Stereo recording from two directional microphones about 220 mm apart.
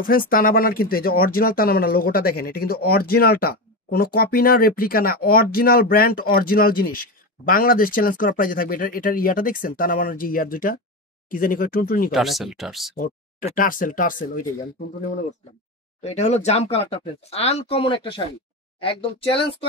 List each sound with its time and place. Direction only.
0.0 s speech: 40° left (ahead or behind)
12.1 s speech: centre (ahead or behind)
12.9 s speech: 35° left (ahead or behind)
16.0 s speech: 30° left (ahead or behind)